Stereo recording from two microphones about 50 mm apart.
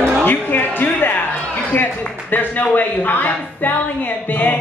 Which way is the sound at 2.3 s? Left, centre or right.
Left.